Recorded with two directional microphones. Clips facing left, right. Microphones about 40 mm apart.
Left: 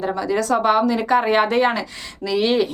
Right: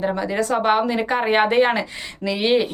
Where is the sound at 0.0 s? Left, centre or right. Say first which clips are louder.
Left 1 dB; right.